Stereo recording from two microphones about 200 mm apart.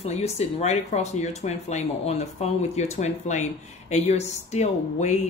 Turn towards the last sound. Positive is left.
turn(degrees=35)  # may be behind; listen again after turning